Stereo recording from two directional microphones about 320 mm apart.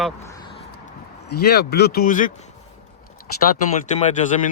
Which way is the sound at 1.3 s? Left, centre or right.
Left.